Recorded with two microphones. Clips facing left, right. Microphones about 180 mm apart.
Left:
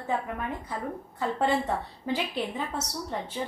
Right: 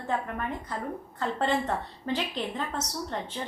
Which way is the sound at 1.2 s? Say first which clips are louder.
Left 1 dB; 10° left (ahead or behind).